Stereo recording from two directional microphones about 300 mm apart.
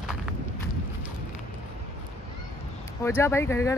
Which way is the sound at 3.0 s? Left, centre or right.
Centre.